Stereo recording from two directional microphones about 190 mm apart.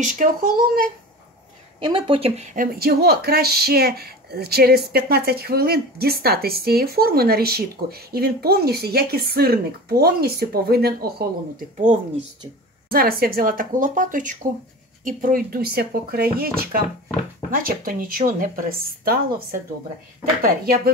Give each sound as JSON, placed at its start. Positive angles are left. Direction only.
{"t": 0.0, "sound": "a woman's voice", "side_deg": -45}
{"t": 1.8, "sound": "speech", "side_deg": -25}
{"t": 12.9, "sound": "a woman's voice", "side_deg": -50}
{"t": 20.4, "sound": "a woman's voice", "side_deg": -50}